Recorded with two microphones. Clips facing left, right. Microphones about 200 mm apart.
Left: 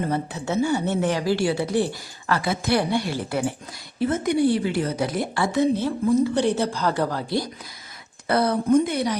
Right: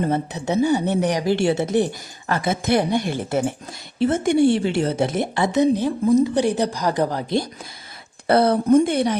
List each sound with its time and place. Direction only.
0.1 s speech: 20° right (ahead or behind)
8.3 s speech: 30° right (ahead or behind)